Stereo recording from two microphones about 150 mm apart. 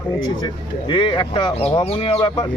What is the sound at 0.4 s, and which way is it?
Speech, 30° left (ahead or behind).